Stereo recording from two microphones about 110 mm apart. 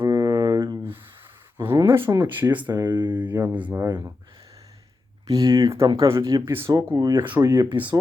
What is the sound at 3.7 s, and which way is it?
Speech, 25° right (ahead or behind).